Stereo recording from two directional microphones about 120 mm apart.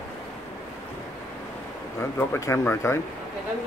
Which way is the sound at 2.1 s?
20° left (ahead or behind).